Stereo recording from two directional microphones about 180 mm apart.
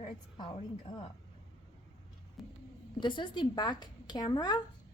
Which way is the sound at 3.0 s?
25° left (ahead or behind).